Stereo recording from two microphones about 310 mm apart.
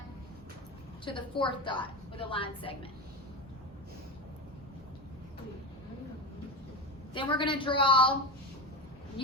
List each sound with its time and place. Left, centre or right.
1.0 s a woman's voice: centre
7.1 s a woman's voice: centre
9.2 s a woman's voice: centre